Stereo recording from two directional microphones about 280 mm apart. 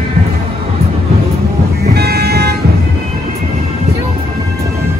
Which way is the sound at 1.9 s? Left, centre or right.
Right.